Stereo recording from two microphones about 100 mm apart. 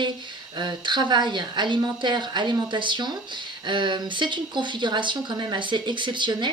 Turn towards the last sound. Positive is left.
turn(degrees=-50)  # may be behind; listen again after turning